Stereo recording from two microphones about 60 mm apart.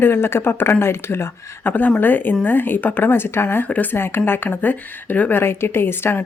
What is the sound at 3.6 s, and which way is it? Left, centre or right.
Speech, left.